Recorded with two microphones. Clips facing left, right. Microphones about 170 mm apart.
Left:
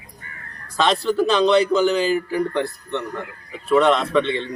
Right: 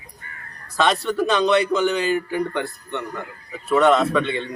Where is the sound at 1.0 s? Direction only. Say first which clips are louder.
Left 2 dB; centre (ahead or behind).